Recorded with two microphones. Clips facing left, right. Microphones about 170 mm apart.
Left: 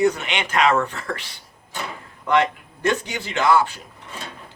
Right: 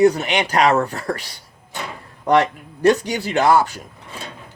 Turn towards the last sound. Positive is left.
turn(degrees=-40)  # may be behind; listen again after turning